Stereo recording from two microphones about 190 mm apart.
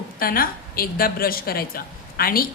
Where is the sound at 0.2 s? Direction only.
50° left (ahead or behind).